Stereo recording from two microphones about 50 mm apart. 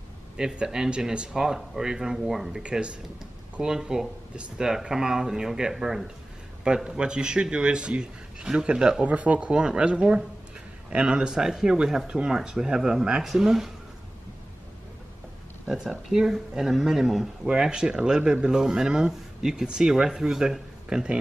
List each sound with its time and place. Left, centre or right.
0.4 s speech: centre
2.6 s a man's voice: right
6.6 s a man's voice: centre
9.1 s a man's voice: right; by 13.7 s centre
15.6 s speech: centre